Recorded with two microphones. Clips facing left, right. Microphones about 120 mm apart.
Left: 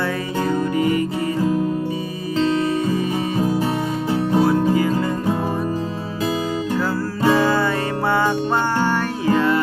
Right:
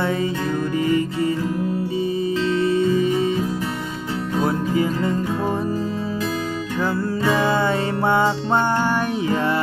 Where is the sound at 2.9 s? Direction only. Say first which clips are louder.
Right 3 dB; 25° right (ahead or behind).